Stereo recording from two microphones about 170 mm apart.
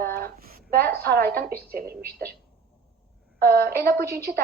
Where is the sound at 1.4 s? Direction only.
65° right (ahead or behind).